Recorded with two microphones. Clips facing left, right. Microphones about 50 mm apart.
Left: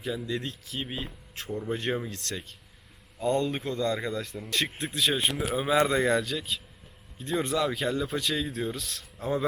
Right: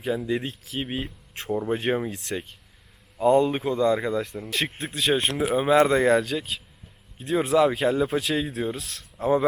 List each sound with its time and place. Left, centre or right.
0.0 s speech: right
0.4 s speech: centre
5.3 s speech: centre